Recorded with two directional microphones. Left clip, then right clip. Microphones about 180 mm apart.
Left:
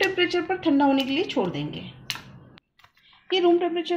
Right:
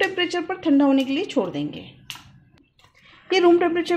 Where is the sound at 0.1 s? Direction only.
50° right (ahead or behind).